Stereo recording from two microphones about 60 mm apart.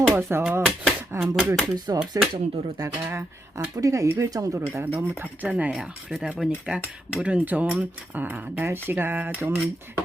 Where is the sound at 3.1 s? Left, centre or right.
Right.